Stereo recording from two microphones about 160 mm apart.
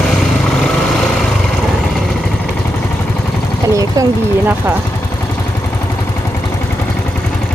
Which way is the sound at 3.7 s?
20° right (ahead or behind).